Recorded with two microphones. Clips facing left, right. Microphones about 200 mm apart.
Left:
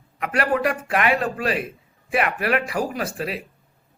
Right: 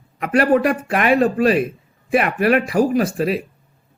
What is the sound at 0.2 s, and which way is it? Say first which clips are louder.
A man's voice: right 7 dB; 40° right (ahead or behind).